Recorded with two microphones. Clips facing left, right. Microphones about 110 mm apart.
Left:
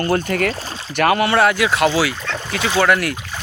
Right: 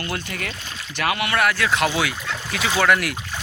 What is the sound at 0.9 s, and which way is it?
Speech, 45° left (ahead or behind).